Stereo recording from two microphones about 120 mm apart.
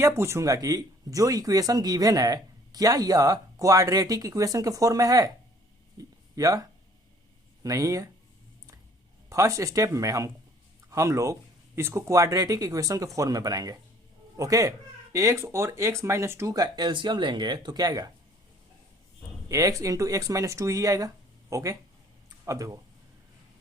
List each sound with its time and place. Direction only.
0.0 s speech: 25° right (ahead or behind)
6.0 s a sound: 30° right (ahead or behind)
7.6 s speech: 30° right (ahead or behind)
9.3 s speech: 25° right (ahead or behind)
19.5 s speech: 30° right (ahead or behind)